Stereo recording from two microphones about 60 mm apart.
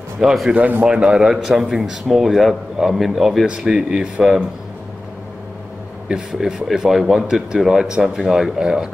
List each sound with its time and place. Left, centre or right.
0.2 s speech: centre
0.6 s speech: right
0.8 s speech: centre
6.0 s speech: centre